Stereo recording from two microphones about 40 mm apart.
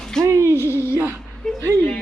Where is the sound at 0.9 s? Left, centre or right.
Right.